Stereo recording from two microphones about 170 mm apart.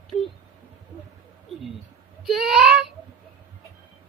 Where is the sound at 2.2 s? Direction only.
Centre (ahead or behind).